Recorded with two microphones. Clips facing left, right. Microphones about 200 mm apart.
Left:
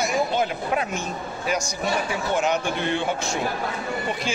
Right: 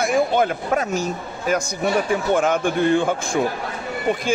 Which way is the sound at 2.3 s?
50° right (ahead or behind).